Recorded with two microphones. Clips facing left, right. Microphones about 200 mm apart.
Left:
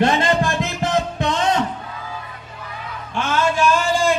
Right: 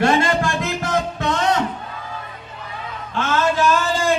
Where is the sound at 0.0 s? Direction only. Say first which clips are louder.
Even; 20° left (ahead or behind).